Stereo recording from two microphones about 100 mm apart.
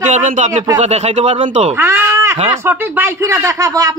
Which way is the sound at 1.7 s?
25° right (ahead or behind).